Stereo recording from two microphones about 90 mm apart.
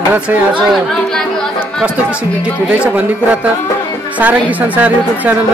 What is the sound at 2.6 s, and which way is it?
A woman's voice, 15° right (ahead or behind).